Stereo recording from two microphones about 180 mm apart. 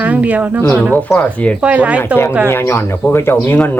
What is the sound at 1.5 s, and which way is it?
Speech, 5° right (ahead or behind).